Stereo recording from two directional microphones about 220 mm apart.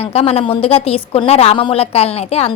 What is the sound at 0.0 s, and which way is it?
A woman's voice, 30° left (ahead or behind).